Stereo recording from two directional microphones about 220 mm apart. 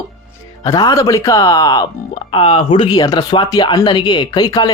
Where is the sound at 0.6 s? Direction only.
15° left (ahead or behind).